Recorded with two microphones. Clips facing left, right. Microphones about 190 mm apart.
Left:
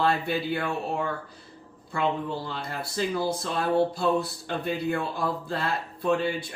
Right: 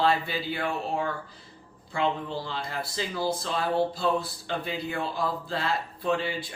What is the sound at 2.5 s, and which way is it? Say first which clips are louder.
Speech: even; 55° left (ahead or behind).